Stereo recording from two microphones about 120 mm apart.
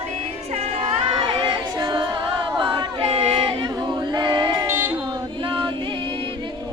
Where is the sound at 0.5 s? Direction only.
45° right (ahead or behind).